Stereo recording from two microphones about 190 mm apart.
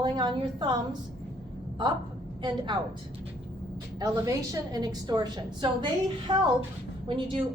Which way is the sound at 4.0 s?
20° right (ahead or behind).